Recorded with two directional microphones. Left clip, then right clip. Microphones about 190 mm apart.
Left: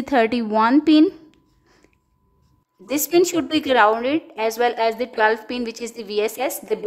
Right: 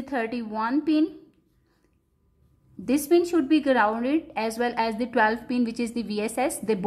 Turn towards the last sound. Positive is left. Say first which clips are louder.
# left 2 dB
turn(degrees=20)  # may be behind; listen again after turning